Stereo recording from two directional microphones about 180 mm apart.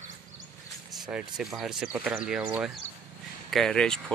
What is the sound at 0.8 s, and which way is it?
Speech, 5° right (ahead or behind).